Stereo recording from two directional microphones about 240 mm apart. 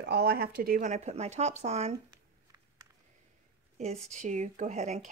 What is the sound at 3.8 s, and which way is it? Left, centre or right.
Speech, right.